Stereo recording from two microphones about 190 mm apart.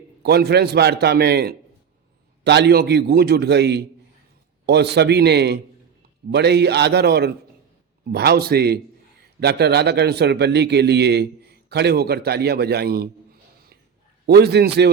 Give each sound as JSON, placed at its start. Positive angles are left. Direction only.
{"t": 0.2, "sound": "a man's voice", "side_deg": -55}